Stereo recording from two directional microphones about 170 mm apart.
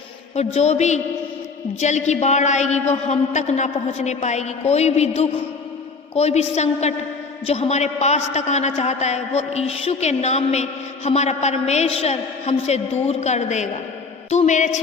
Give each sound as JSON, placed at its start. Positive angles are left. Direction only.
{"t": 0.3, "sound": "a man's voice", "side_deg": 40}